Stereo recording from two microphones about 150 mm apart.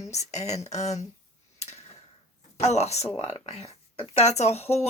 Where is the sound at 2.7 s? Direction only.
45° left (ahead or behind).